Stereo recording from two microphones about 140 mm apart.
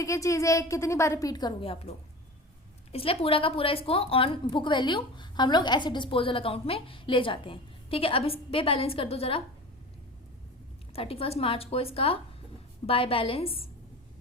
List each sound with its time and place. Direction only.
0.0 s a woman's voice: 20° left (ahead or behind); by 9.4 s 45° left (ahead or behind)
10.9 s a woman's voice: 45° left (ahead or behind)